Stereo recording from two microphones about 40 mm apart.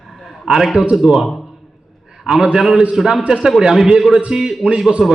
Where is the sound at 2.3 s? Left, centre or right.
Centre.